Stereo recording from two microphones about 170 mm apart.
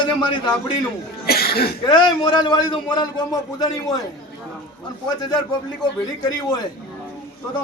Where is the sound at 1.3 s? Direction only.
65° left (ahead or behind).